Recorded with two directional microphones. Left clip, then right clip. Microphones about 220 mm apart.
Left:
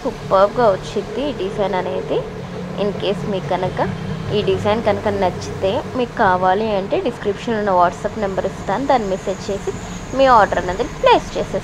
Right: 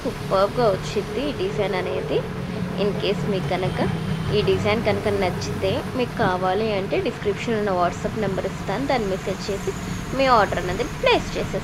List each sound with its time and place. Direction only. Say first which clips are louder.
0.3 s a woman's voice: left 6 dB; 10° left (ahead or behind)
4.3 s a woman's voice: left 3 dB; 15° left (ahead or behind)
10.1 s a woman's voice: left 6 dB; 15° left (ahead or behind)